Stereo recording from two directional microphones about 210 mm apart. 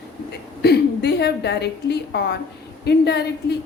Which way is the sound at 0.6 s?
50° left (ahead or behind).